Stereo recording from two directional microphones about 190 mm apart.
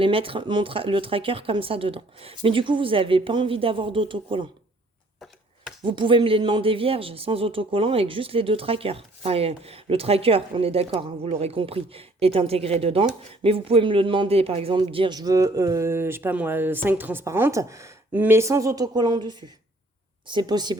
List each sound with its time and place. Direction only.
0.0 s speech: 30° right (ahead or behind)
5.8 s a man's voice: 25° right (ahead or behind)